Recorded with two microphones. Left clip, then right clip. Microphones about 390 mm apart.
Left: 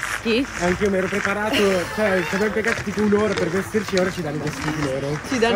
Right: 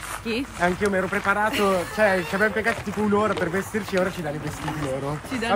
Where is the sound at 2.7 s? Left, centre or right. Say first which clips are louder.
Left 3 dB; centre.